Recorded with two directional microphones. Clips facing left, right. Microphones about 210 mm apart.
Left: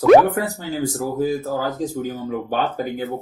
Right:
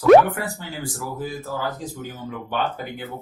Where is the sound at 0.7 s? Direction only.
40° left (ahead or behind).